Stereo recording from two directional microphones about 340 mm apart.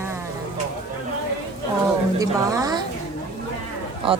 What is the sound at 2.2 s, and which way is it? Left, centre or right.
Speech, centre.